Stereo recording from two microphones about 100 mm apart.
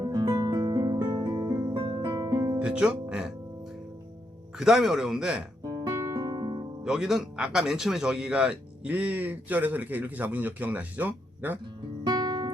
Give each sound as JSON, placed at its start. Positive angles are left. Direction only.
{"t": 0.1, "sound": "music", "side_deg": -45}
{"t": 1.7, "sound": "music", "side_deg": -55}
{"t": 2.1, "sound": "music", "side_deg": -35}
{"t": 2.6, "sound": "speech", "side_deg": -10}
{"t": 4.5, "sound": "speech", "side_deg": -5}
{"t": 5.6, "sound": "guitar", "side_deg": -35}
{"t": 6.8, "sound": "speech", "side_deg": -5}
{"t": 11.6, "sound": "guitar", "side_deg": -45}